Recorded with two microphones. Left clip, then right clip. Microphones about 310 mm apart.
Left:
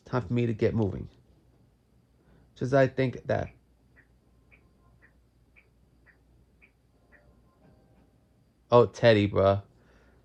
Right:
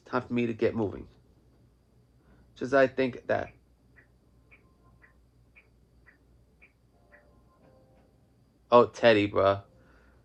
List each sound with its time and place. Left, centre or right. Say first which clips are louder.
0.0 s speech: even; left
2.6 s speech: even; left
8.7 s speech: even; left